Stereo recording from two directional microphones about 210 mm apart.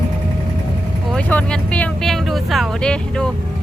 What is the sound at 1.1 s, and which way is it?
Speech, 5° left (ahead or behind).